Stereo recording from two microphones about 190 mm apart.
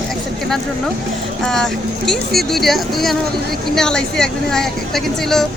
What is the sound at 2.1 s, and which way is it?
Speech, centre (ahead or behind).